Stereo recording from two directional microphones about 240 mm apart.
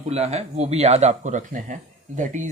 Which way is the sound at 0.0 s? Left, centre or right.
Right.